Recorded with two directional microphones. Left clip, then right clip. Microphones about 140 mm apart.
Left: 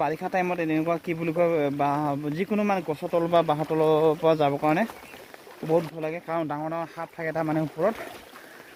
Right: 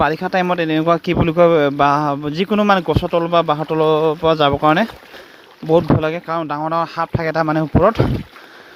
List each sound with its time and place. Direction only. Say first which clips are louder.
0.0 s a man's voice: right 9 dB; 30° right (ahead or behind)
3.2 s speech: right 5 dB; 25° right (ahead or behind)
4.5 s speech: right 10 dB; 40° right (ahead or behind)
6.2 s speech: right 8 dB; 25° right (ahead or behind)
6.7 s speech: right 13 dB; 35° right (ahead or behind)